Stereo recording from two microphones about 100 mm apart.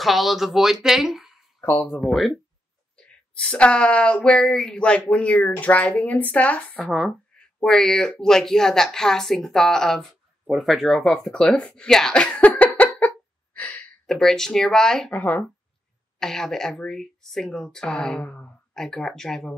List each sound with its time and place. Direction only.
0.0 s speech: centre (ahead or behind)
3.3 s speech: 10° left (ahead or behind)
13.6 s a sound: 15° left (ahead or behind)
14.0 s speech: 5° left (ahead or behind)
16.2 s speech: 5° left (ahead or behind)